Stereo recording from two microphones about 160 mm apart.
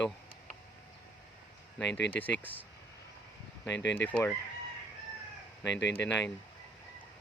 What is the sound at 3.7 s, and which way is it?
Speech, 90° left.